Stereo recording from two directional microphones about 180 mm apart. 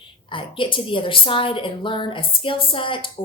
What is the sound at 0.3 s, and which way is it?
A woman's voice, 30° left (ahead or behind).